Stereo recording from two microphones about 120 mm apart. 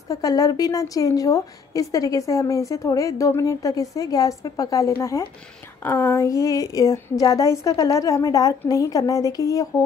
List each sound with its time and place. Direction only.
0.1 s a woman's voice: 30° left (ahead or behind)